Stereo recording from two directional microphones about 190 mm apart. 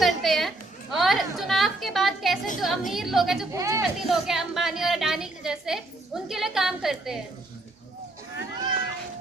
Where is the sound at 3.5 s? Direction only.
15° right (ahead or behind).